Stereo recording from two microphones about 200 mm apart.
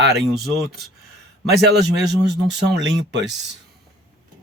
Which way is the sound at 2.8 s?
60° right (ahead or behind).